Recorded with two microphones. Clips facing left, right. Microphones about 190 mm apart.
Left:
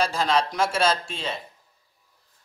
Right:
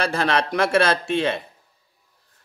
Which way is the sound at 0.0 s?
60° right (ahead or behind).